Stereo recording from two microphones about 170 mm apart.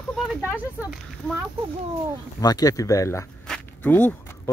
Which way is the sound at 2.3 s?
20° left (ahead or behind).